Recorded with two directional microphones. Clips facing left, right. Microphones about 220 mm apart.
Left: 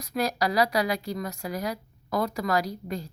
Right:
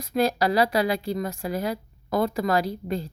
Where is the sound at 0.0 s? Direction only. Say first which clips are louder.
Right 4 dB; 30° right (ahead or behind).